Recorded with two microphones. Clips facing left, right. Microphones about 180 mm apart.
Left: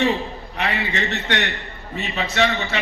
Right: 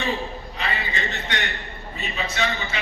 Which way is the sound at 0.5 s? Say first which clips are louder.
Left 6 dB; 70° left (ahead or behind).